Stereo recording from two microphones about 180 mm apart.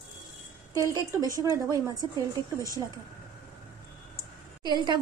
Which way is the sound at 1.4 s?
20° right (ahead or behind).